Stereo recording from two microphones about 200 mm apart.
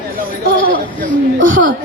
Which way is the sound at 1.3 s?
75° right (ahead or behind).